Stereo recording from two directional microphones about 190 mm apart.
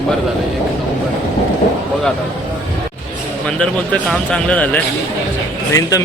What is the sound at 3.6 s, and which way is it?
Speech, 5° left (ahead or behind).